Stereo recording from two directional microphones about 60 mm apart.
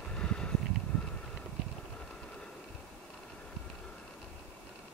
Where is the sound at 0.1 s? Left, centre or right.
Centre.